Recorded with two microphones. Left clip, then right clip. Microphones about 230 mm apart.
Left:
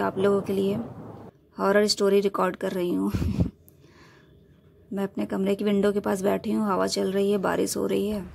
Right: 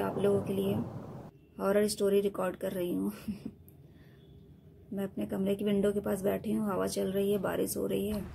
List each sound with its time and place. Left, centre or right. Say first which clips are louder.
0.0 s a woman's voice: left 6 dB; left
4.9 s a woman's voice: left 7 dB; left